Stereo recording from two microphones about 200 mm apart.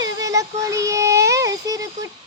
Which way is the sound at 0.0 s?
15° right (ahead or behind).